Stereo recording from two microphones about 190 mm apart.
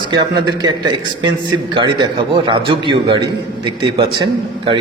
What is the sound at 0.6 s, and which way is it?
A man's voice, 25° right (ahead or behind).